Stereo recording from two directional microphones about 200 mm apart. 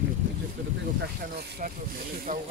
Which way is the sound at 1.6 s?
40° right (ahead or behind).